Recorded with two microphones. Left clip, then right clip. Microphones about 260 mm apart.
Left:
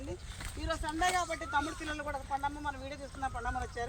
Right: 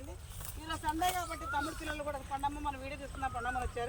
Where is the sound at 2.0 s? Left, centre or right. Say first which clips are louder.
Left 2 dB; centre.